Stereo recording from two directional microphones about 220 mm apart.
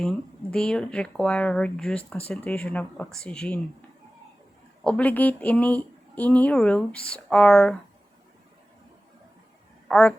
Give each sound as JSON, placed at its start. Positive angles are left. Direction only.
{"t": 0.5, "sound": "a woman's voice", "side_deg": 5}
{"t": 9.9, "sound": "a woman's voice", "side_deg": 5}